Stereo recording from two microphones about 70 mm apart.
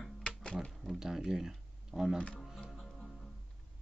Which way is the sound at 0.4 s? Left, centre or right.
Centre.